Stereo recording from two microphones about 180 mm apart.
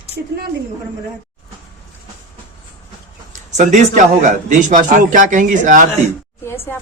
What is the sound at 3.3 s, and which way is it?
A man's voice, 40° right (ahead or behind).